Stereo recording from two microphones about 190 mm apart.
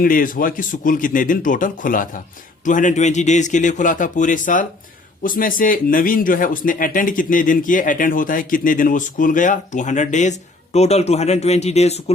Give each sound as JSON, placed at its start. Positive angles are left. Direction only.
{"t": 0.0, "sound": "a man's voice", "side_deg": 45}